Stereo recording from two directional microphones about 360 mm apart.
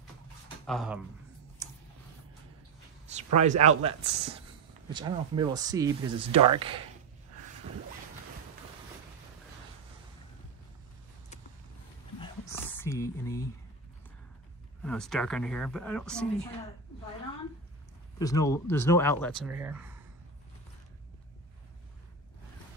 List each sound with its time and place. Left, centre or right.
0.7 s speech: centre
1.6 s clicking: centre
3.3 s speech: centre
12.2 s a sound: centre
14.8 s speech: centre
18.2 s speech: centre